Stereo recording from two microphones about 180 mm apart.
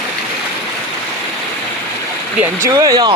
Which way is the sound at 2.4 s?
20° right (ahead or behind).